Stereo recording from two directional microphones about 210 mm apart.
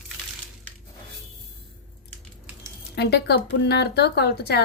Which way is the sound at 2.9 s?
55° left (ahead or behind).